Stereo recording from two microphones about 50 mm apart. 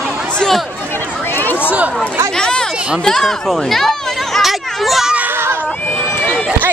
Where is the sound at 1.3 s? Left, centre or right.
Left.